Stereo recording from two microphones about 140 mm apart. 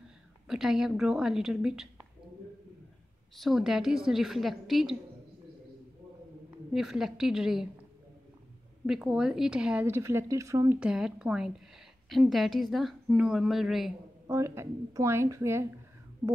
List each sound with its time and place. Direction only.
0.5 s a woman's voice: 5° right (ahead or behind)
3.3 s a woman's voice: centre (ahead or behind)
6.7 s a woman's voice: centre (ahead or behind)
8.8 s a woman's voice: 5° right (ahead or behind); by 10.8 s 20° right (ahead or behind)
10.8 s a woman's voice: 5° right (ahead or behind)
14.2 s a woman's voice: 20° right (ahead or behind)